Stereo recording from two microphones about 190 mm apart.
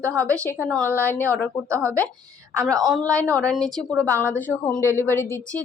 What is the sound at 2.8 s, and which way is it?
A woman's voice, centre (ahead or behind).